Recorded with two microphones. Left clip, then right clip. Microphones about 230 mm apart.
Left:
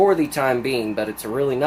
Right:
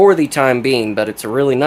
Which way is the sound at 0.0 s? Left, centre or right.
Right.